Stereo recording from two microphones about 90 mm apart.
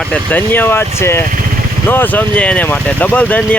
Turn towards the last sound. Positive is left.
turn(degrees=15)  # may be behind; listen again after turning